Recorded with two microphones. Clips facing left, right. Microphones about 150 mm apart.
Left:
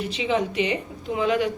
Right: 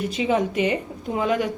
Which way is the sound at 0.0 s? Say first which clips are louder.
Right 2 dB; 45° right (ahead or behind).